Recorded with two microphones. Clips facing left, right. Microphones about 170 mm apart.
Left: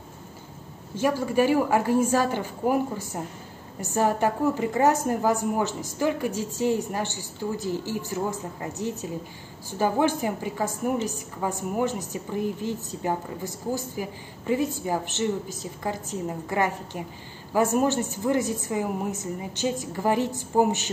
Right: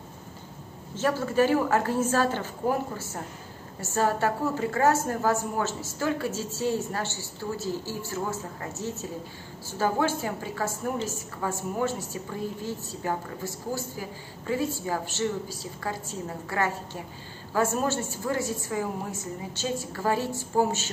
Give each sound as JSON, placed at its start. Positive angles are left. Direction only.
{"t": 0.9, "sound": "a woman's voice", "side_deg": 15}